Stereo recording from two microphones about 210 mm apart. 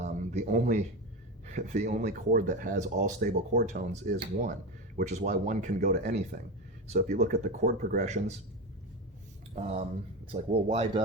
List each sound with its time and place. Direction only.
0.0 s a sound: 35° right (ahead or behind)
1.5 s speech: 35° right (ahead or behind)
9.6 s speech: 30° right (ahead or behind)